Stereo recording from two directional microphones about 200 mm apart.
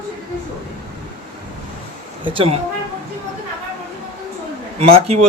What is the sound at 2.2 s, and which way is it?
Speech, 25° right (ahead or behind).